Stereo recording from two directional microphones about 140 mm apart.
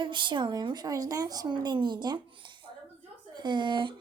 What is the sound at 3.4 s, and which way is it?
Speech, 35° right (ahead or behind).